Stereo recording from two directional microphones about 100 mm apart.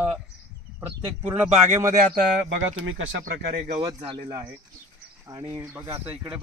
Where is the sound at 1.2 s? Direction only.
20° right (ahead or behind).